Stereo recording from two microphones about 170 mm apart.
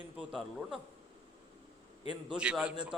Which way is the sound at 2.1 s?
5° right (ahead or behind).